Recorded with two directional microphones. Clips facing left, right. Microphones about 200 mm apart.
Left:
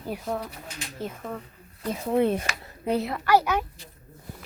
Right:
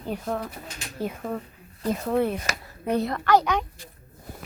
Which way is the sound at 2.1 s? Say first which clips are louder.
Left 3 dB; 20° left (ahead or behind).